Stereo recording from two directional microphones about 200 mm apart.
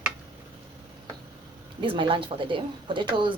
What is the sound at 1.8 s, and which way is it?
Speech, 25° right (ahead or behind).